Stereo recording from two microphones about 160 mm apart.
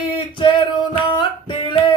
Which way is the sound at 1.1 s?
30° left (ahead or behind).